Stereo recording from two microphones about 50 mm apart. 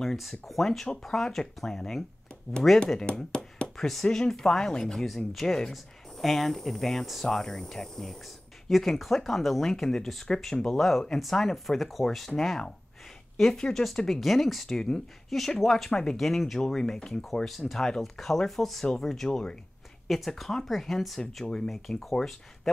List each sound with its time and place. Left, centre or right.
0.0 s speech: centre
3.0 s a sound: centre
3.7 s speech: centre
16.2 s speech: centre
20.1 s speech: centre